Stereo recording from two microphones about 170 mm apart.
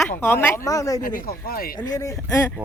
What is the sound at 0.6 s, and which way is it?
Speech, 20° left (ahead or behind).